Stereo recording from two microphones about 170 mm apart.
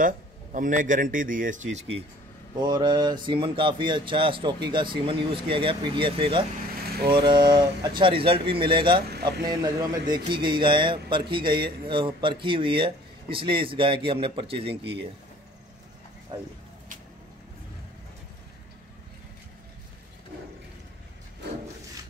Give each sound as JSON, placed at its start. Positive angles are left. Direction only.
{"t": 0.0, "sound": "speech", "side_deg": -50}
{"t": 2.6, "sound": "speech", "side_deg": -25}
{"t": 14.8, "sound": "speech", "side_deg": -80}
{"t": 16.3, "sound": "speech", "side_deg": -25}